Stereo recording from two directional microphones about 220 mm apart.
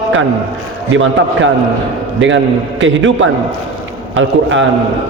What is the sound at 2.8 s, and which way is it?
A man's voice, 60° right (ahead or behind).